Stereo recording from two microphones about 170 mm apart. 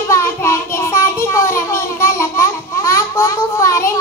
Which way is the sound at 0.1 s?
15° left (ahead or behind).